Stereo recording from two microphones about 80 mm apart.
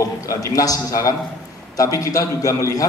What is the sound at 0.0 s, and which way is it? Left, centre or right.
A man's voice, left.